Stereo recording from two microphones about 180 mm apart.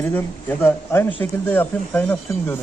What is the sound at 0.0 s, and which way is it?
Speech, 10° left (ahead or behind).